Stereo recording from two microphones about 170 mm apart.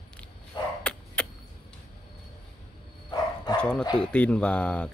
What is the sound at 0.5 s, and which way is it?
Dog, 25° left (ahead or behind).